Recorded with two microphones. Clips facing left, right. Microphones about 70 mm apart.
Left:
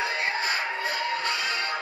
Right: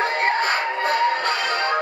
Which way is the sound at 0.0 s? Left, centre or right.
Right.